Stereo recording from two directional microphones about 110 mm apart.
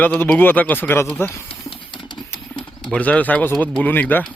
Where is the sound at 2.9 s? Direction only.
10° left (ahead or behind).